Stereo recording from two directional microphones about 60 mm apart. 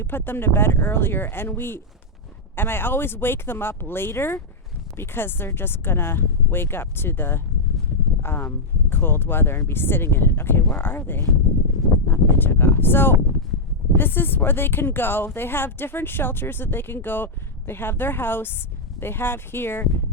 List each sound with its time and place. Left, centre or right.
0.0 s speech: left